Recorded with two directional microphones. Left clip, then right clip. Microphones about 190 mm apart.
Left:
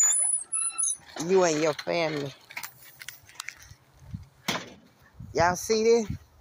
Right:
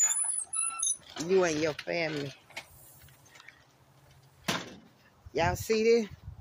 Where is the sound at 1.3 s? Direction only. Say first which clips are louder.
Left 4 dB; 15° left (ahead or behind).